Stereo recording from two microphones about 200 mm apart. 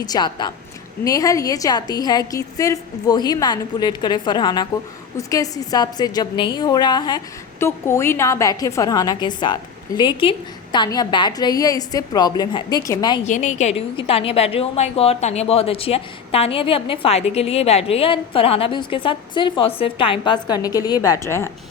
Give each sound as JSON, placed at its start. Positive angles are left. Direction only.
{"t": 0.0, "sound": "a woman's voice", "side_deg": 20}
{"t": 13.2, "sound": "a woman's voice", "side_deg": 35}